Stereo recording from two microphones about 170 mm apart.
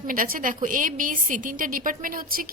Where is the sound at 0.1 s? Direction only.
55° right (ahead or behind).